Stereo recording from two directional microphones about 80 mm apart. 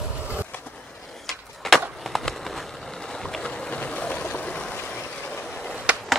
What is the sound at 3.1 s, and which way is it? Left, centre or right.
Boat, centre.